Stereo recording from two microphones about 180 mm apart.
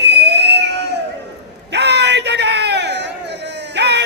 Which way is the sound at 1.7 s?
70° right (ahead or behind).